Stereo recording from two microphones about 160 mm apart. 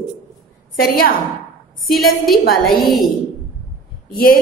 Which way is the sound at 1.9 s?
Centre (ahead or behind).